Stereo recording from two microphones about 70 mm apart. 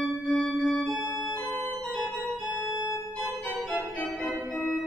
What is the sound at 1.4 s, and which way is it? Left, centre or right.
Organ, left.